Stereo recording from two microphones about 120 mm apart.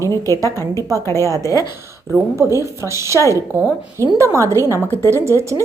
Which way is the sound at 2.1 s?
20° right (ahead or behind).